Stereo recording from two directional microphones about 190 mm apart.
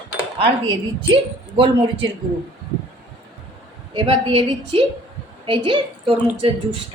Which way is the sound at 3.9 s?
30° right (ahead or behind).